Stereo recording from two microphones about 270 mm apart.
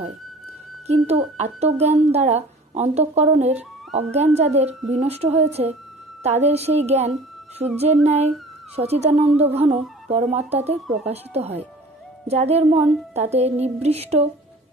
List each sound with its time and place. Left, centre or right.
0.8 s speech: right